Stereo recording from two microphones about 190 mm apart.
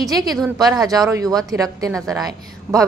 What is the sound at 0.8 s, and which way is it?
A woman's voice, 20° right (ahead or behind).